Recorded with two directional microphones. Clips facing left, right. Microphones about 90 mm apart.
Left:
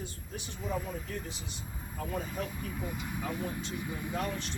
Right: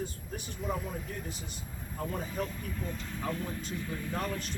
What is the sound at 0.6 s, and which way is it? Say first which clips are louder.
Speech: even; centre (ahead or behind).